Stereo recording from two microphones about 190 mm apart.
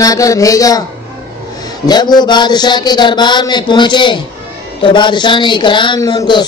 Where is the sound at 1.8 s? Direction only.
20° left (ahead or behind).